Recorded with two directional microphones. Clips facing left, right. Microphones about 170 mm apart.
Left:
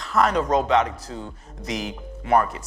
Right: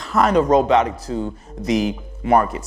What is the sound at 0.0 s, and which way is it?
Speech, 10° right (ahead or behind).